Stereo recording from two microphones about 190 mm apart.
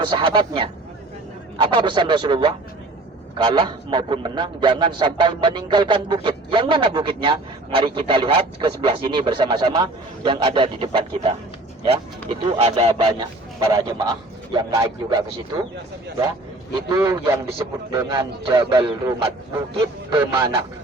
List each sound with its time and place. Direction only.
0.0 s a man's voice: 25° right (ahead or behind)
16.9 s a man's voice: 20° right (ahead or behind)